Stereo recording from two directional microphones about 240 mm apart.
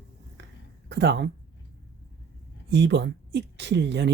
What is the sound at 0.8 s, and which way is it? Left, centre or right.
Speech, right.